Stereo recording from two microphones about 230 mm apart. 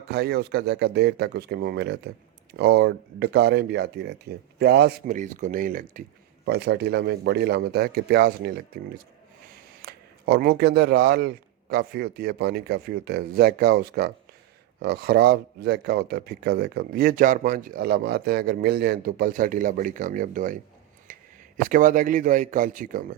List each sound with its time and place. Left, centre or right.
0.1 s speech: right
9.8 s speech: right
21.1 s a sound: right
21.7 s speech: right